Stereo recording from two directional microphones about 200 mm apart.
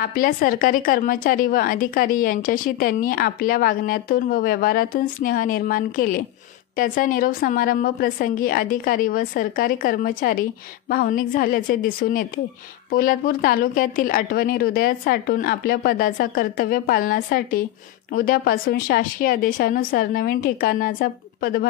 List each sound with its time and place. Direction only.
0.0 s a woman's voice: 45° left (ahead or behind)